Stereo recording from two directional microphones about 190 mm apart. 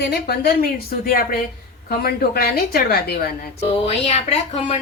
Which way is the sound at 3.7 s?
30° left (ahead or behind).